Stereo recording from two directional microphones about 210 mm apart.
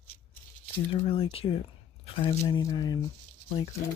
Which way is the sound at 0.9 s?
25° left (ahead or behind).